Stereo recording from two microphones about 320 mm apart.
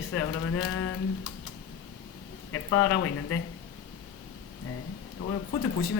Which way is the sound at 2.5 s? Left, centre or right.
Left.